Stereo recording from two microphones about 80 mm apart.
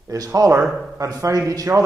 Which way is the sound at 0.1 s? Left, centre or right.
Right.